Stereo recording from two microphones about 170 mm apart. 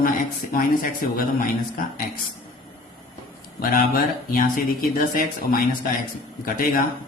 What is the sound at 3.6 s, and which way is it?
A man's voice, 55° left (ahead or behind).